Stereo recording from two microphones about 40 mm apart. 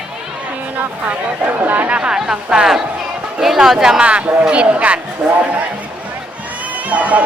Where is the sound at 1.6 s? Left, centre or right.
Right.